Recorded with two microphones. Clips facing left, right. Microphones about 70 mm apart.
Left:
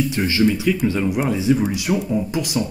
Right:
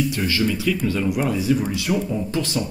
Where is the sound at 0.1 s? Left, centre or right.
Left.